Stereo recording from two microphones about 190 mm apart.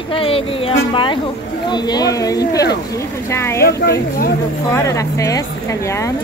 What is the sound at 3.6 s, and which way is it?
Speech, 55° left (ahead or behind).